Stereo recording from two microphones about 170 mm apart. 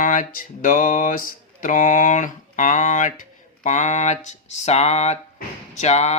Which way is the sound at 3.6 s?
45° left (ahead or behind).